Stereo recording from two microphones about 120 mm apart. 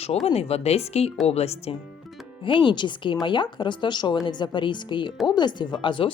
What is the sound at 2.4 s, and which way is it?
Speech, 45° left (ahead or behind).